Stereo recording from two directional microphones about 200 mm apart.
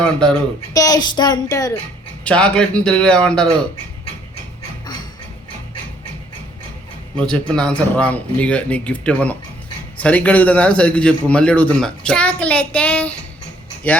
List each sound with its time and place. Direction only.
0.0 s speech: 5° left (ahead or behind)
0.7 s a woman's voice: 20° left (ahead or behind)
2.2 s a man's voice: 5° left (ahead or behind)
7.2 s a man's voice: 5° left (ahead or behind)